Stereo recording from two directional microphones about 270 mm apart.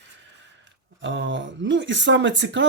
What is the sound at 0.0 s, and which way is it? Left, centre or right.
Speech, right.